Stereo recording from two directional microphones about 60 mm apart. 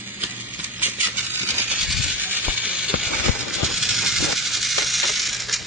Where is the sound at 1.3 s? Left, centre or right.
Right.